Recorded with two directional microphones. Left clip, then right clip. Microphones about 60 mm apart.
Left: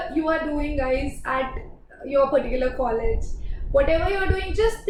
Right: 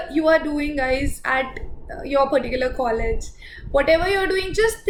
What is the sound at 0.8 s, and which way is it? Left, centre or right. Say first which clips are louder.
A woman's voice: right 2 dB; right.